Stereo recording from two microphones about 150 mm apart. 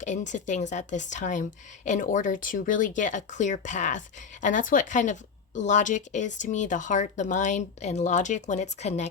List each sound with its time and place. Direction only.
0.0 s speech: 55° left (ahead or behind)